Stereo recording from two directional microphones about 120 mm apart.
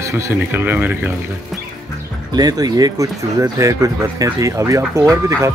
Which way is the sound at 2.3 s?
35° right (ahead or behind).